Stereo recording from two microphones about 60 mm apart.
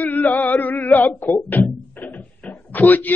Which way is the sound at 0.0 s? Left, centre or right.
Left.